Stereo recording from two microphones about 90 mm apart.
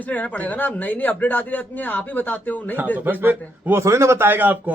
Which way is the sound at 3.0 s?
20° right (ahead or behind).